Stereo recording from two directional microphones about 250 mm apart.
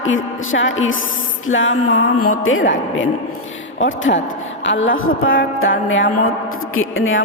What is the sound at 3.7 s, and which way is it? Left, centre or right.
A woman's voice, left.